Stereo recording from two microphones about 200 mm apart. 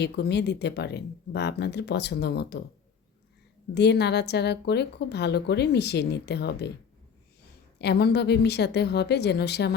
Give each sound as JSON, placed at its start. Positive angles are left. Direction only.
{"t": 0.0, "sound": "a woman's voice", "side_deg": 55}
{"t": 3.8, "sound": "a woman's voice", "side_deg": 55}
{"t": 7.8, "sound": "a woman's voice", "side_deg": 55}